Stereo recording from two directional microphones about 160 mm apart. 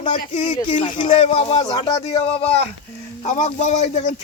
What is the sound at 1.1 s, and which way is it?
Speech, 40° left (ahead or behind).